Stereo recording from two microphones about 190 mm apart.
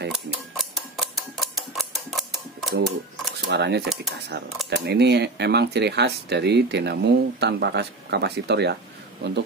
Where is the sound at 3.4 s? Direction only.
60° right (ahead or behind).